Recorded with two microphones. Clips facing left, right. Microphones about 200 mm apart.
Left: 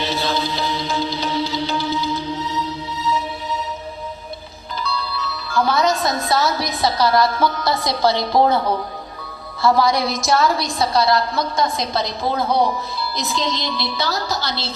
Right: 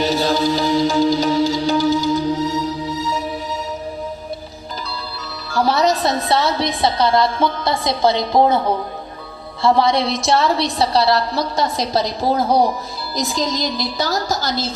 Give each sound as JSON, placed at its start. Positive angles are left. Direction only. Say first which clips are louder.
{"t": 0.0, "sound": "music", "louder": "right 5 dB", "side_deg": -40}
{"t": 4.8, "sound": "a woman's voice", "louder": "left 7 dB", "side_deg": -40}